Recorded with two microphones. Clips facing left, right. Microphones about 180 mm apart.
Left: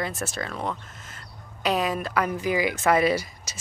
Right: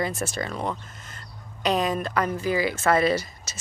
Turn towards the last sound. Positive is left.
turn(degrees=10)  # may be behind; listen again after turning